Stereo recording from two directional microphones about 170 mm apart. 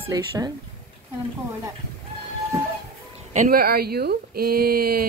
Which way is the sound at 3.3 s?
60° right (ahead or behind).